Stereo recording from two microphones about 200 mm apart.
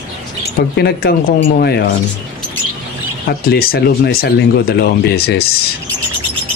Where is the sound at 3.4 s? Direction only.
50° left (ahead or behind).